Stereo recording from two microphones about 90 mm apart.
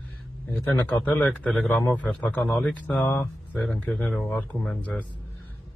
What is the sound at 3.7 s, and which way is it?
Speech, 5° left (ahead or behind).